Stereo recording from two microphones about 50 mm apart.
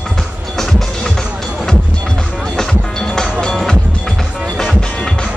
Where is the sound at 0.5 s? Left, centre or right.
Centre.